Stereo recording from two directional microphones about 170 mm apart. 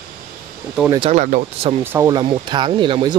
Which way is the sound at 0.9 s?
30° right (ahead or behind).